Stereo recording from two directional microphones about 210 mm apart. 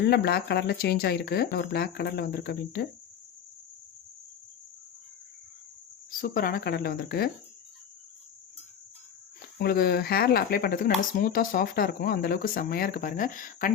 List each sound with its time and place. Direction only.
0.0 s speech: 50° left (ahead or behind)
6.1 s speech: 40° left (ahead or behind)
9.6 s speech: 45° left (ahead or behind)